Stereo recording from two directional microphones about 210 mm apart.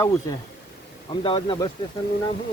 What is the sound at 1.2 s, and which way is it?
Speech, 25° left (ahead or behind).